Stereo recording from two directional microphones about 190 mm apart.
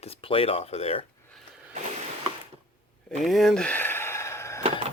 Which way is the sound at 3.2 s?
Centre (ahead or behind).